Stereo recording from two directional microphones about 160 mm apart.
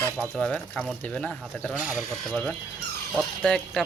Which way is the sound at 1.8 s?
10° right (ahead or behind).